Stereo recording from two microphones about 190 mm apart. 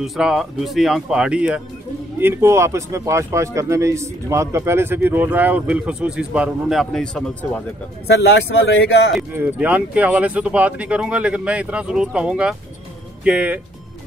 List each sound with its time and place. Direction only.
0.0 s speech: 5° right (ahead or behind)
8.1 s a man's voice: 60° left (ahead or behind)
9.1 s speech: 5° right (ahead or behind)